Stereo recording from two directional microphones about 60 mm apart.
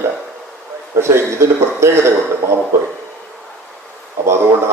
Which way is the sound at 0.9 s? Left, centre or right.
Right.